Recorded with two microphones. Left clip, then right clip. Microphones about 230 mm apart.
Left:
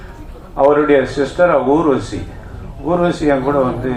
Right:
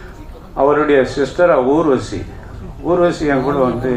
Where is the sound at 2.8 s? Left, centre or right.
Right.